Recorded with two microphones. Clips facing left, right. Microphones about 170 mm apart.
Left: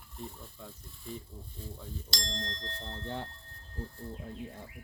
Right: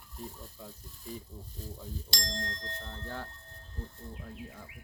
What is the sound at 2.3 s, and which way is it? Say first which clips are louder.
Speech: right 1 dB; 25° left (ahead or behind).